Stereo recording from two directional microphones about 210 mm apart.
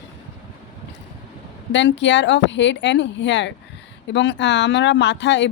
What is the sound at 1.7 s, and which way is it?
Speech, 60° left (ahead or behind).